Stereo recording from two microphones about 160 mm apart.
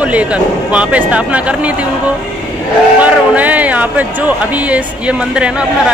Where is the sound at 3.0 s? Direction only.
10° right (ahead or behind).